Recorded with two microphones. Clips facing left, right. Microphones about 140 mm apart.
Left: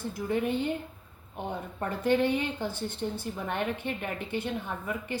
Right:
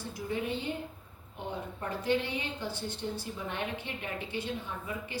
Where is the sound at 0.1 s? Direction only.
50° left (ahead or behind).